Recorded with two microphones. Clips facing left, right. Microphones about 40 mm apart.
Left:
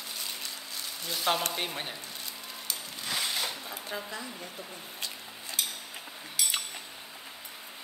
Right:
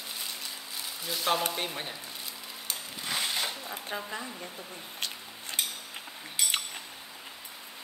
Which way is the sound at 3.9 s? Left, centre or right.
Right.